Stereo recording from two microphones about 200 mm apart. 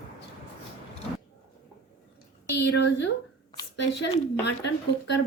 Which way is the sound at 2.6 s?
60° left (ahead or behind).